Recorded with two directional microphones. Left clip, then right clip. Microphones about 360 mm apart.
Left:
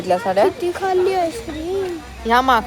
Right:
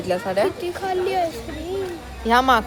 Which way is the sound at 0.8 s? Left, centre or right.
Centre.